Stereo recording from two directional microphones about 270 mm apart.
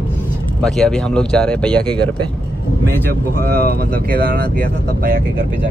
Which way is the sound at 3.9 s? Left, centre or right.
Right.